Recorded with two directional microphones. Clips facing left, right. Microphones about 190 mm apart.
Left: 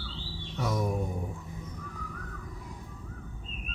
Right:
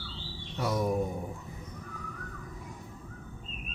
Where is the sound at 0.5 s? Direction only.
Centre (ahead or behind).